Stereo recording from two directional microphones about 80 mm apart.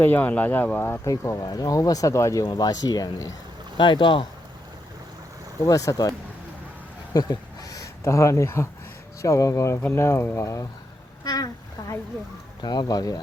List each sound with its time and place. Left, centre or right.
0.0 s speech: left
1.0 s speech: left
1.5 s speech: left
2.4 s speech: left
3.8 s speech: left
5.6 s speech: left
7.1 s a sound: left
9.2 s speech: left
11.2 s a sound: left
12.6 s speech: left